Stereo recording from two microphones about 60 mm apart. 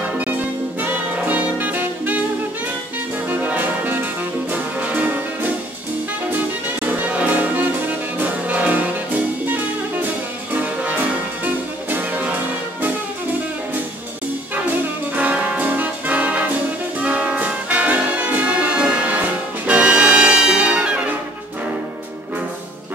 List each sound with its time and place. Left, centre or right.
0.0 s music: right
3.3 s brass instrument: right
4.5 s music: right
6.9 s music: right
15.1 s music: right